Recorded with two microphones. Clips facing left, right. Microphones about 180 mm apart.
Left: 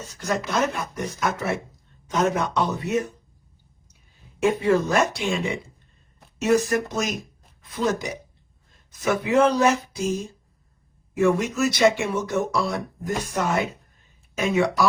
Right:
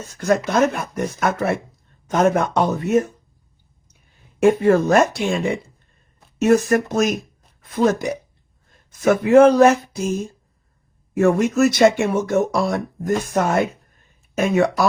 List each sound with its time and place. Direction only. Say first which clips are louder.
0.1 s speech: right 7 dB; 55° right (ahead or behind)
4.4 s speech: right 6 dB; 50° right (ahead or behind)